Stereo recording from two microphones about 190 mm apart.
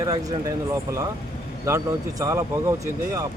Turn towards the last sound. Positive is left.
turn(degrees=-15)  # may be behind; listen again after turning